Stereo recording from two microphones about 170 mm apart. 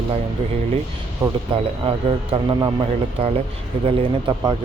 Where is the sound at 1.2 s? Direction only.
20° right (ahead or behind).